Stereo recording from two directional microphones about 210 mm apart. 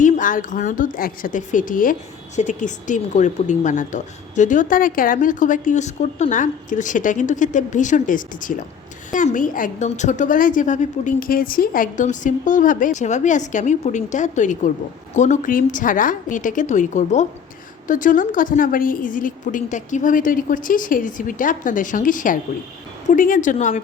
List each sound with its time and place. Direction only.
0.0 s a woman's voice: 40° left (ahead or behind)